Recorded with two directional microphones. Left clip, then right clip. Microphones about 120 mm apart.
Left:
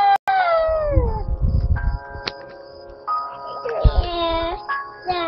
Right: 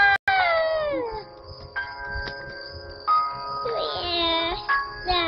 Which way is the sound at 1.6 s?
30° right (ahead or behind).